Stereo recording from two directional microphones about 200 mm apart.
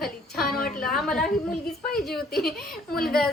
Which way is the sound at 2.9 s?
50° left (ahead or behind).